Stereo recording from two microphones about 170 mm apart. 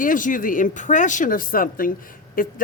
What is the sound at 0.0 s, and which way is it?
A woman's voice, 50° left (ahead or behind).